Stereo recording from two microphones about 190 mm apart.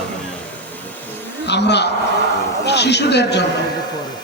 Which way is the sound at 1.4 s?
65° left (ahead or behind).